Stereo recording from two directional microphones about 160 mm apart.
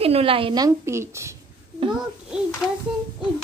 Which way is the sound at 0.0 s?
35° right (ahead or behind).